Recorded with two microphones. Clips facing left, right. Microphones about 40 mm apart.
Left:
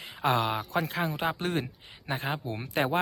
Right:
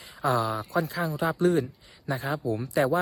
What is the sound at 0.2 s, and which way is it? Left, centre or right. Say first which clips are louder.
Speech: right 1 dB; left.